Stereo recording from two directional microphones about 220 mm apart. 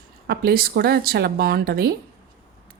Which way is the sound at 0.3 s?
45° right (ahead or behind).